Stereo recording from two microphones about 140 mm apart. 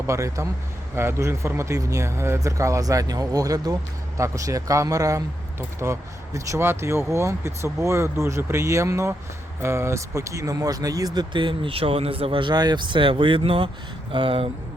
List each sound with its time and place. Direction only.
0.1 s speech: 20° right (ahead or behind)